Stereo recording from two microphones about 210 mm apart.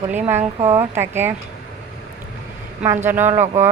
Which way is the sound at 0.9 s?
10° right (ahead or behind).